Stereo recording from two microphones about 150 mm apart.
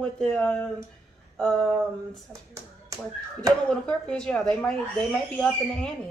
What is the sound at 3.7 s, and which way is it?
Speech, 5° left (ahead or behind).